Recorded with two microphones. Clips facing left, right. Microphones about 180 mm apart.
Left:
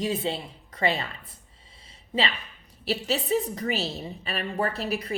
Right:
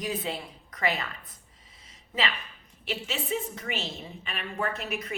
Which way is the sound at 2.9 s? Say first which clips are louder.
Left 6 dB; 35° left (ahead or behind).